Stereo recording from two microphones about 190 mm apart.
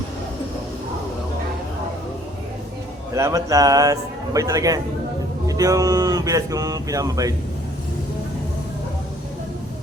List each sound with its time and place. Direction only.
3.2 s a man's voice: 15° right (ahead or behind)